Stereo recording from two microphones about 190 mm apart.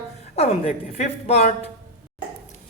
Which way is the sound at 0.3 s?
35° left (ahead or behind).